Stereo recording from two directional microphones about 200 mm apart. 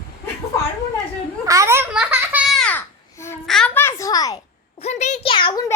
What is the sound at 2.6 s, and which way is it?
Babbling, 10° left (ahead or behind).